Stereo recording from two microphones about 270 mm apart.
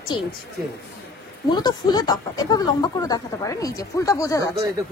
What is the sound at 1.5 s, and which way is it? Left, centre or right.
Speech, centre.